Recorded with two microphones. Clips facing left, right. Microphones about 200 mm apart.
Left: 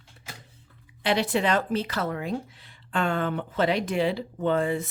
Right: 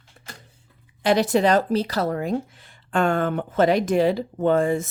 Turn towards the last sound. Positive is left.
turn(degrees=-45)  # may be behind; listen again after turning